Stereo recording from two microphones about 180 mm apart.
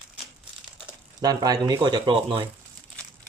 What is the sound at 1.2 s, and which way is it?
Speech, 20° right (ahead or behind).